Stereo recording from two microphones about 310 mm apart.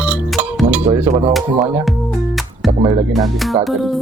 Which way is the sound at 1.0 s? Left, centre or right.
Centre.